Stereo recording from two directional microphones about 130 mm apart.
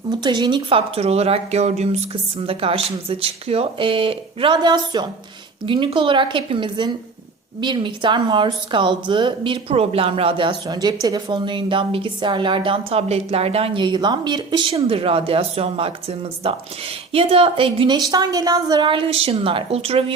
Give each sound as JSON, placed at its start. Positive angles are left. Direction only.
{"t": 0.1, "sound": "a woman's voice", "side_deg": -35}
{"t": 2.5, "sound": "a woman's voice", "side_deg": -45}